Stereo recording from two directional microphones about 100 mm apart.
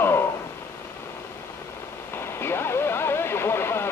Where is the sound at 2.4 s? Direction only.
25° left (ahead or behind).